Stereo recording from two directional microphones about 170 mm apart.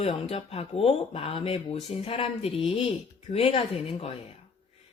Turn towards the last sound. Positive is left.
turn(degrees=35)  # may be behind; listen again after turning